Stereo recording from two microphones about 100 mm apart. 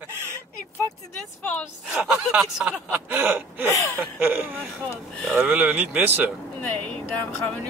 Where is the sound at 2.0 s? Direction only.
10° right (ahead or behind).